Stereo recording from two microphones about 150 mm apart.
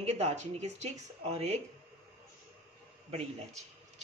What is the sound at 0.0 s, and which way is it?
Speech, 50° right (ahead or behind).